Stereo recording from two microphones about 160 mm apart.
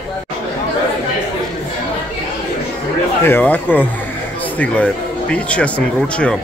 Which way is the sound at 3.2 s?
10° left (ahead or behind).